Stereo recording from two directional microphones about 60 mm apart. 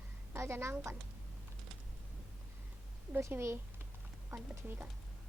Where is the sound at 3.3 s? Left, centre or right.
Right.